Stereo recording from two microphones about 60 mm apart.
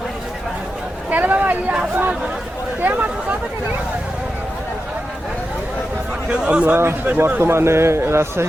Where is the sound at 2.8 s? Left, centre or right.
Right.